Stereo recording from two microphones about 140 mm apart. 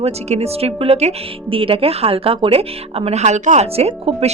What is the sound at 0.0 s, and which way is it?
Speech, 50° right (ahead or behind).